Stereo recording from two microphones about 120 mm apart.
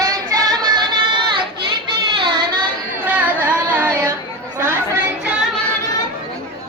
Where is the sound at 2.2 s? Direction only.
45° right (ahead or behind).